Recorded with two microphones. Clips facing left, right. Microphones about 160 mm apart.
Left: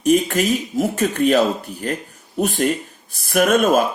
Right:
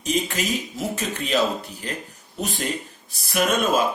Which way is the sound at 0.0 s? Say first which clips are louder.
Left 9 dB; 50° left (ahead or behind).